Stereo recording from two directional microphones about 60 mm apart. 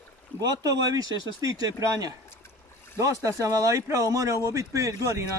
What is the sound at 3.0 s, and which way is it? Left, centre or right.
Speech, right.